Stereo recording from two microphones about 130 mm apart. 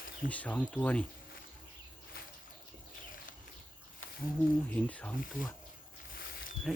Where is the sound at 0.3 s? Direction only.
10° left (ahead or behind).